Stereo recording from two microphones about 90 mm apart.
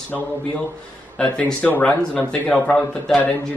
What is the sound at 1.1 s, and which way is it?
Speech, 15° left (ahead or behind).